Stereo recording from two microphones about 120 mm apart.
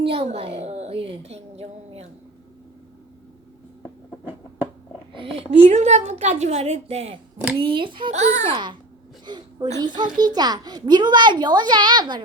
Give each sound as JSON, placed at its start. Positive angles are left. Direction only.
{"t": 0.0, "sound": "a woman's voice", "side_deg": -55}
{"t": 5.6, "sound": "a woman's voice", "side_deg": -70}
{"t": 7.6, "sound": "a child's voice", "side_deg": -45}
{"t": 8.1, "sound": "a woman's voice", "side_deg": -70}
{"t": 9.2, "sound": "a sound", "side_deg": -40}
{"t": 9.7, "sound": "a child's voice", "side_deg": -40}